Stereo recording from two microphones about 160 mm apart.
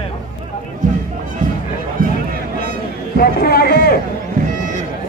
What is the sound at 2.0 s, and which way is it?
Music, 60° right (ahead or behind).